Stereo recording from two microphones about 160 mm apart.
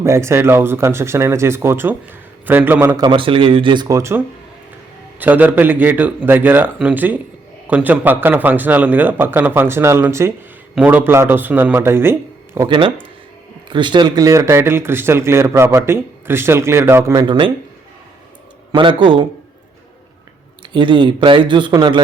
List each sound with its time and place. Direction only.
0.0 s speech: 15° right (ahead or behind)
3.0 s speech: 30° right (ahead or behind)
5.2 s speech: 10° right (ahead or behind)
12.5 s speech: 30° right (ahead or behind)
17.2 s speech: 30° right (ahead or behind)
18.7 s speech: 30° right (ahead or behind)
20.6 s speech: 30° right (ahead or behind)